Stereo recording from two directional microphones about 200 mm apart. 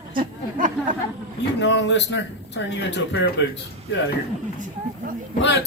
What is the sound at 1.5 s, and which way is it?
Speech, 60° left (ahead or behind).